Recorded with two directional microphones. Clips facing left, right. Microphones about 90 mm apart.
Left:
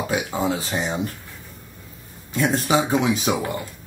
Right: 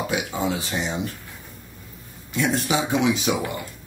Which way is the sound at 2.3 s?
40° left (ahead or behind).